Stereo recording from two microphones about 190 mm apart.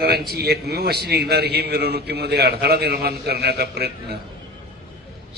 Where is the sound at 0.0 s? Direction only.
55° right (ahead or behind).